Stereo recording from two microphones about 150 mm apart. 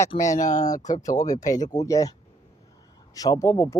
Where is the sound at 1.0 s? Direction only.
25° left (ahead or behind).